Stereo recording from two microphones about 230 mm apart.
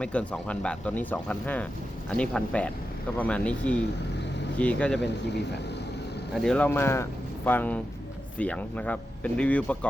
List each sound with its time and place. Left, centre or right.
0.0 s speech: centre
5.0 s speech: left
6.3 s speech: centre